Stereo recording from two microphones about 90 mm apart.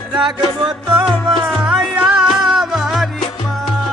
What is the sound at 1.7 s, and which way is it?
Music, 10° right (ahead or behind).